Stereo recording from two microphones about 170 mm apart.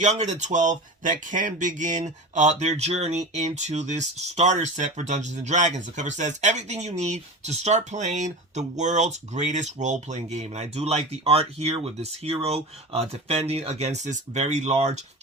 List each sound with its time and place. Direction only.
0.0 s speech: 40° right (ahead or behind)